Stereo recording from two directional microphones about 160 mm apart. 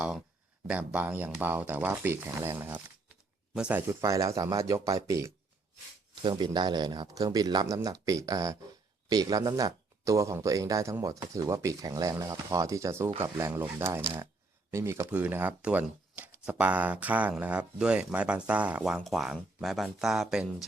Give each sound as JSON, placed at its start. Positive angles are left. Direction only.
{"t": 0.7, "sound": "speech", "side_deg": -10}